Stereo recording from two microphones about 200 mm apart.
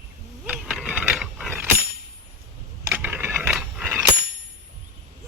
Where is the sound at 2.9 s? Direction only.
10° right (ahead or behind).